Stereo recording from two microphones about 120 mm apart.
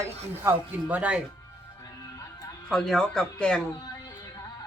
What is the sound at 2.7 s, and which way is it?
Speech, 5° left (ahead or behind).